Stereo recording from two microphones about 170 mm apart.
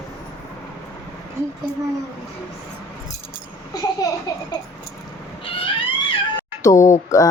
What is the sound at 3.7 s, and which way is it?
Speech, 25° left (ahead or behind).